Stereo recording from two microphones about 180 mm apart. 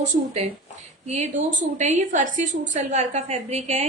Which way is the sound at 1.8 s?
40° right (ahead or behind).